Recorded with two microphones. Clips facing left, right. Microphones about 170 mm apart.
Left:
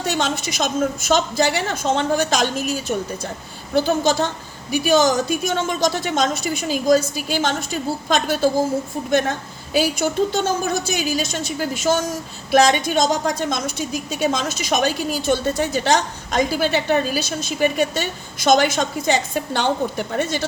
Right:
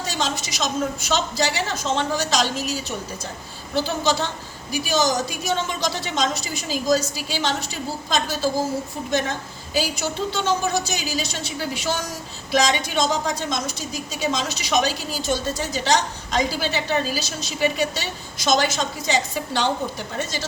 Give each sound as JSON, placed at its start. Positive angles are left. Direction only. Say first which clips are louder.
{"t": 0.0, "sound": "a woman's voice", "louder": "left 4 dB", "side_deg": 60}
{"t": 9.7, "sound": "a woman's voice", "louder": "left 6 dB", "side_deg": 55}